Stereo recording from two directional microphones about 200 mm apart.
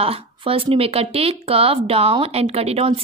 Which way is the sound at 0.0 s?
30° right (ahead or behind).